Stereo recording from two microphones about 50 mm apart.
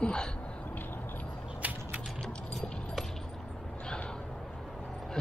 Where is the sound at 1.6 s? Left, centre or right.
Right.